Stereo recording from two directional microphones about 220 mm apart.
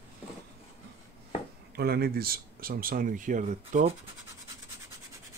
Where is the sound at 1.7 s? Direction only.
45° right (ahead or behind); by 4.0 s 30° right (ahead or behind).